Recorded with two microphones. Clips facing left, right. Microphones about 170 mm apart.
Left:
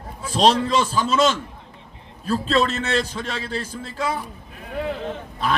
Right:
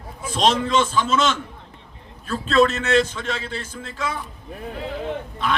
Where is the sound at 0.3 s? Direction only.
35° left (ahead or behind).